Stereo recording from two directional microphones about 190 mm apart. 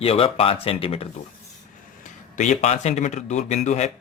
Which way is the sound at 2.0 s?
40° left (ahead or behind).